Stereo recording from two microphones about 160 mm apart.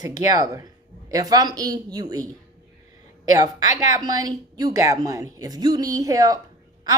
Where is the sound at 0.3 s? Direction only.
20° right (ahead or behind).